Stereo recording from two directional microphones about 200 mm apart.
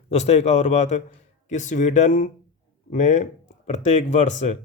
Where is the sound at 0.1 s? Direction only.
30° left (ahead or behind).